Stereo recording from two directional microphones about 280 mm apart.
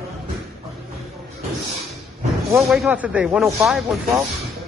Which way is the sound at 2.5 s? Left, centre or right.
Centre.